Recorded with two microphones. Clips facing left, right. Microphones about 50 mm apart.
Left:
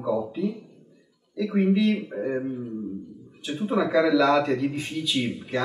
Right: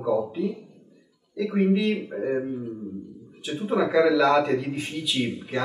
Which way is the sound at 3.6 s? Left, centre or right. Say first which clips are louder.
Right 1 dB; centre.